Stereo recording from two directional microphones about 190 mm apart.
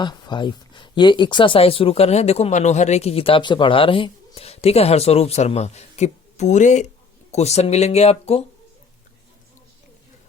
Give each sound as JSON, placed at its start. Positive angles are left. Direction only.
{"t": 0.0, "sound": "speech", "side_deg": 25}